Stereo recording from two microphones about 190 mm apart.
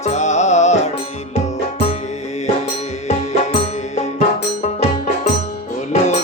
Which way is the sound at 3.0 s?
35° left (ahead or behind).